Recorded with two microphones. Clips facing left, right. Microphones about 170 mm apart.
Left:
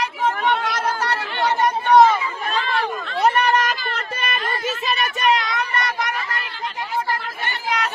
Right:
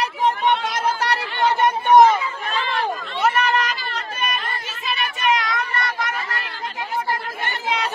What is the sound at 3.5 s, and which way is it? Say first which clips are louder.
Chatter: left 2 dB; 45° left (ahead or behind).